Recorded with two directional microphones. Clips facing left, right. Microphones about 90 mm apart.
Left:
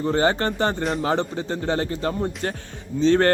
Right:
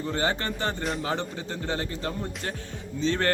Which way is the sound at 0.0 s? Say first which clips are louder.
Left 7 dB; 45° left (ahead or behind).